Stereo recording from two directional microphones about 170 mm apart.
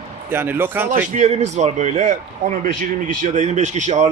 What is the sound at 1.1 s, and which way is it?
A man's voice, 45° right (ahead or behind).